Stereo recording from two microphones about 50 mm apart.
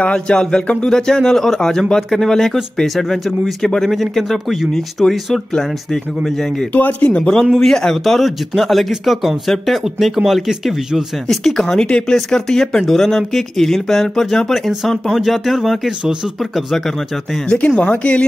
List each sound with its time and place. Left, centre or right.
0.0 s a sound: centre
0.8 s speech: centre
6.7 s speech: left
7.5 s speech: centre
11.8 s speech: centre
17.5 s a sound: left